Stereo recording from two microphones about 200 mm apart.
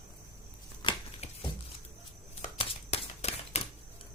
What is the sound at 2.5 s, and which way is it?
Scissors, 30° left (ahead or behind).